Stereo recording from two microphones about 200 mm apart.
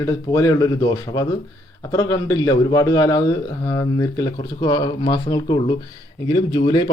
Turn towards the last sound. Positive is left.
turn(degrees=20)  # may be behind; listen again after turning